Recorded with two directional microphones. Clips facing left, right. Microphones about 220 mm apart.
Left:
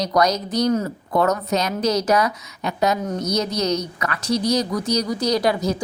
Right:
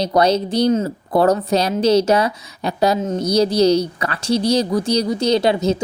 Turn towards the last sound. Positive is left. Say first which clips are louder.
# right 4 dB
turn(degrees=-25)  # may be behind; listen again after turning